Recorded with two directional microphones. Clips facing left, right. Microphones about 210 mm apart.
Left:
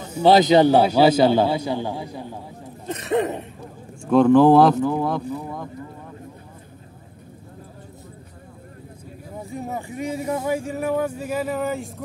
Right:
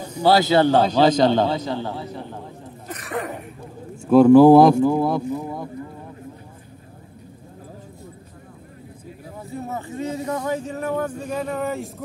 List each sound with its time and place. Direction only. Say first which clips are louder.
0.2 s speech: left 2 dB; 20° left (ahead or behind)
2.9 s throat clearing: left 7 dB; 25° left (ahead or behind)
4.0 s speech: right 3 dB; 5° right (ahead or behind)
9.5 s speech: right 1 dB; 15° left (ahead or behind)